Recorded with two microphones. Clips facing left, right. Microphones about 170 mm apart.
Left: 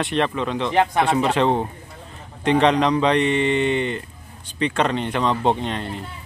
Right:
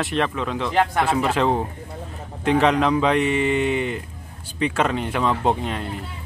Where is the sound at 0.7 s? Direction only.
20° left (ahead or behind).